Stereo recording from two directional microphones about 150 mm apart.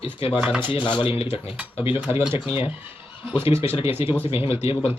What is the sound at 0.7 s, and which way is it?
Speech, 35° left (ahead or behind).